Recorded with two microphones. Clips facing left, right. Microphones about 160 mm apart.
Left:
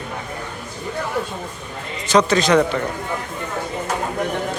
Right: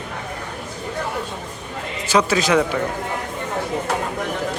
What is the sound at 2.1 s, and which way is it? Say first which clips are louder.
Speech: left 2 dB; 5° right (ahead or behind).